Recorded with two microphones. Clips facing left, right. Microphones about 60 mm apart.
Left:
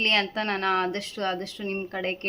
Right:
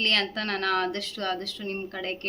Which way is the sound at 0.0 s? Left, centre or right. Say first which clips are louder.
Left 2 dB; left.